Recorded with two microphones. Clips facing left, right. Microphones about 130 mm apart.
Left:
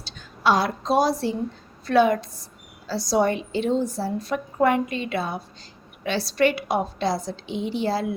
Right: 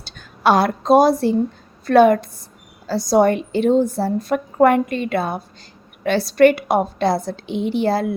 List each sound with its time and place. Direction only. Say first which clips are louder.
0.0 s a woman's voice: right 5 dB; 55° right (ahead or behind)